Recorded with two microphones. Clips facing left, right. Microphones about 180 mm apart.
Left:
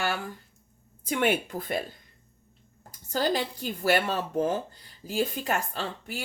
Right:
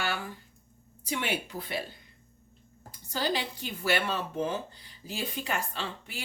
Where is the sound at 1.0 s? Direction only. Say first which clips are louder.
Left 7 dB; 50° left (ahead or behind).